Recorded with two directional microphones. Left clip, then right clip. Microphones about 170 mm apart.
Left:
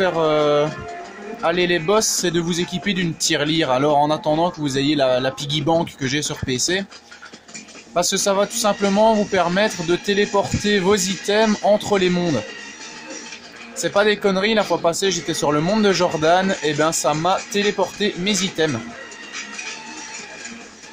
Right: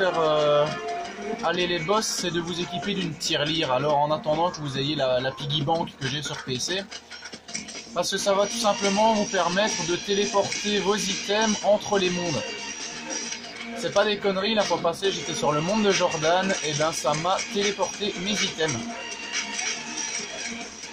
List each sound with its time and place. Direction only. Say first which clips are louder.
0.0 s speech: left 4 dB; 50° left (ahead or behind)
7.9 s speech: left 5 dB; 50° left (ahead or behind)
13.9 s speech: left 6 dB; 50° left (ahead or behind)